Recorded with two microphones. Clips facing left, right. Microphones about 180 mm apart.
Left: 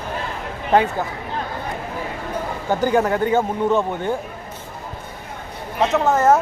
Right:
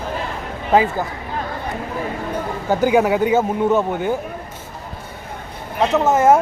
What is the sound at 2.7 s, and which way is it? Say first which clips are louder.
Speech: right 3 dB; 10° right (ahead or behind).